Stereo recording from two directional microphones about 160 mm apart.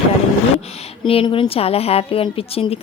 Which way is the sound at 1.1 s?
35° left (ahead or behind).